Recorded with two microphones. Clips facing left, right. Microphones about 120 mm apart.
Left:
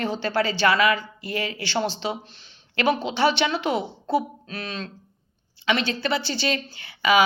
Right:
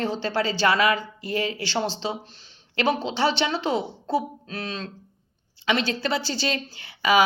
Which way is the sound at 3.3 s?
35° right (ahead or behind).